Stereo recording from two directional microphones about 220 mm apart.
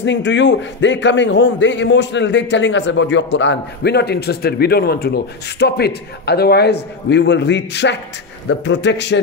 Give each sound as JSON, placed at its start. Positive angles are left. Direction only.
{"t": 0.0, "sound": "a man's voice", "side_deg": 55}